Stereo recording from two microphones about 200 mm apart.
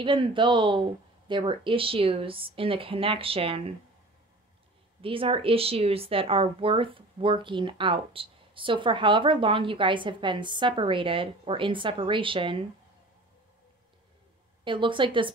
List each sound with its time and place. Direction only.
0.0 s speech: 25° right (ahead or behind)
5.0 s speech: 25° right (ahead or behind)
14.6 s speech: 25° right (ahead or behind)